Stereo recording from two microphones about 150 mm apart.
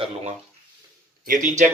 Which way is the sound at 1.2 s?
60° right (ahead or behind).